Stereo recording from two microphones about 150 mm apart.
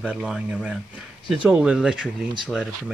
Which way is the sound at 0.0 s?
5° right (ahead or behind).